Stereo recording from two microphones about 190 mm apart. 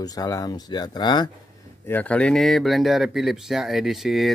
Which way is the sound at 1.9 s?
10° left (ahead or behind).